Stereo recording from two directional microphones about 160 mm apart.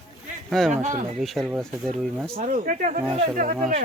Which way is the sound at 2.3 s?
50° right (ahead or behind).